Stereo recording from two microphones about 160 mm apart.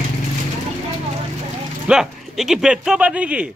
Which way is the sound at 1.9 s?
5° right (ahead or behind).